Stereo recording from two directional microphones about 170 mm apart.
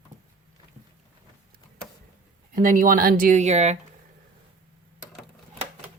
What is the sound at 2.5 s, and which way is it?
Speech, 50° right (ahead or behind).